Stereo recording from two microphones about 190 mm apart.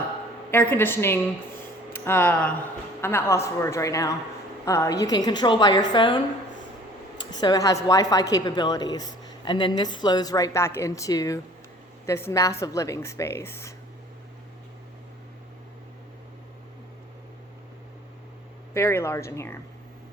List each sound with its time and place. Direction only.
0.5 s a woman's voice: 10° left (ahead or behind)
7.3 s a woman's voice: 20° left (ahead or behind)
18.7 s speech: 15° left (ahead or behind)